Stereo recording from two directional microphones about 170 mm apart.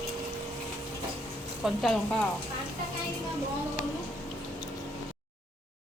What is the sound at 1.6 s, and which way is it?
Speech, centre (ahead or behind).